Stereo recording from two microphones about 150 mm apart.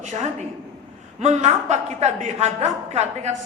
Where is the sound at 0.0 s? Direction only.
50° right (ahead or behind).